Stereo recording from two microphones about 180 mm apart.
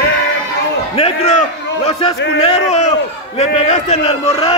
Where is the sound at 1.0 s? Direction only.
35° left (ahead or behind).